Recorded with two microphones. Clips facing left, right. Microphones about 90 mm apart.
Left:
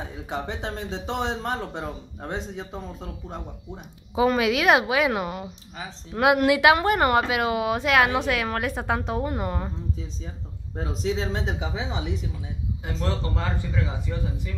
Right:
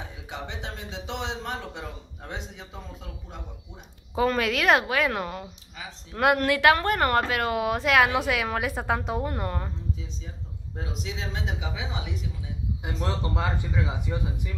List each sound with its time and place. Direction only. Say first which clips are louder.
0.3 s a man's voice: left 6 dB; 40° left (ahead or behind)
4.1 s a woman's voice: left 3 dB; 10° left (ahead or behind)
10.8 s a man's voice: left 8 dB; 40° left (ahead or behind)
12.8 s speech: left 2 dB; 15° right (ahead or behind)